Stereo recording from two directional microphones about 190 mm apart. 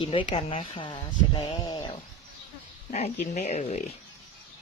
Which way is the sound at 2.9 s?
35° left (ahead or behind).